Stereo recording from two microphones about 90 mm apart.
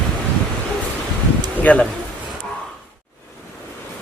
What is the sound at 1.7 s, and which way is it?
Speech, 15° left (ahead or behind).